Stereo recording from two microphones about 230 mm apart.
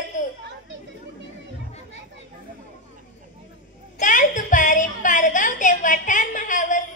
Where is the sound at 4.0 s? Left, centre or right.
Left.